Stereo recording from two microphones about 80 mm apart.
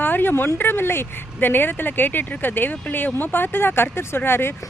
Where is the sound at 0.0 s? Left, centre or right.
Left.